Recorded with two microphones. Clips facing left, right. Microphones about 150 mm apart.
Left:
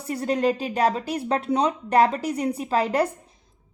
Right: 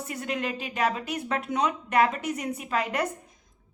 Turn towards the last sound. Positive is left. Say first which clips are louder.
# left 6 dB
turn(degrees=35)  # may be behind; listen again after turning